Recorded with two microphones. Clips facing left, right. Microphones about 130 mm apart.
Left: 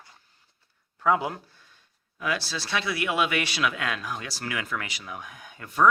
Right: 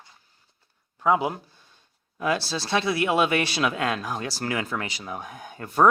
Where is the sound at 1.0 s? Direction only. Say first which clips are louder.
Right 2 dB; 20° right (ahead or behind).